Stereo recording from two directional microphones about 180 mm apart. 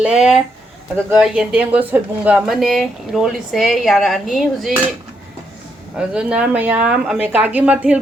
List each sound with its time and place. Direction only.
0.0 s speech: 5° right (ahead or behind)
6.0 s a woman's voice: 5° right (ahead or behind)